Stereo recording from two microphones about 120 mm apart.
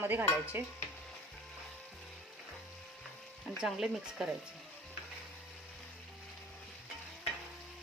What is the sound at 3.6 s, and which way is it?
Speech, 5° right (ahead or behind).